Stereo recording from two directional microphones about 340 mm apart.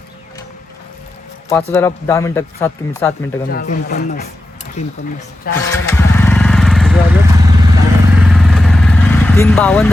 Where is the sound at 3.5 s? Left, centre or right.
Left.